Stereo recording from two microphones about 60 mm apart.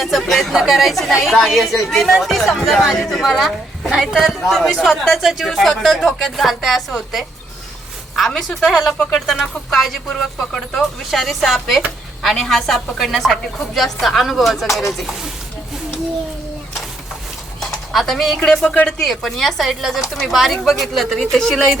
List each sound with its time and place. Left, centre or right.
0.0 s a woman's voice: centre
8.1 s a woman's voice: centre
17.6 s bird: centre
18.6 s speech: left
18.9 s a woman's voice: centre